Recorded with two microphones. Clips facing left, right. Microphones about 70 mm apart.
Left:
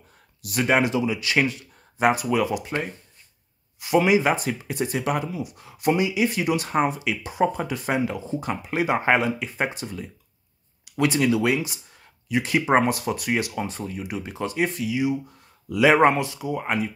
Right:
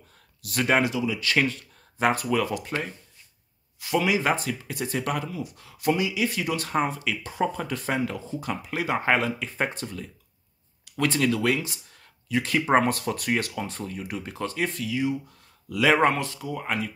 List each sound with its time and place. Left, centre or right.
0.4 s speech: centre
0.8 s speech: left
1.2 s speech: centre